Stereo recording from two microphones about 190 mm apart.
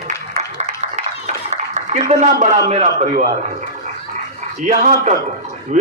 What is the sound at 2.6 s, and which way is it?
A man's voice, 35° right (ahead or behind).